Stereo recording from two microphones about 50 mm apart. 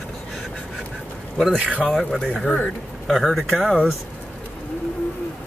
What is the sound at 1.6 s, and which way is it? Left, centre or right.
Speech, right.